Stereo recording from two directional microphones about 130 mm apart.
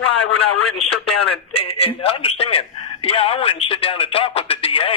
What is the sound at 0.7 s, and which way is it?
A man's voice, 50° left (ahead or behind).